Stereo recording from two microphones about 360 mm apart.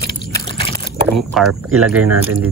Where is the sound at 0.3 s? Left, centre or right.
Centre.